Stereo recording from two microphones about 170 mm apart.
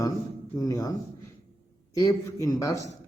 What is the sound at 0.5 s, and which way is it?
A man's voice, 20° left (ahead or behind).